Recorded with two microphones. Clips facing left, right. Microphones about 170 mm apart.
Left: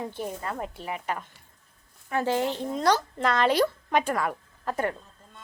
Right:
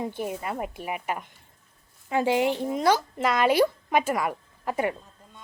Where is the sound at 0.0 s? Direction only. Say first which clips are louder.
Right 2 dB; 10° right (ahead or behind).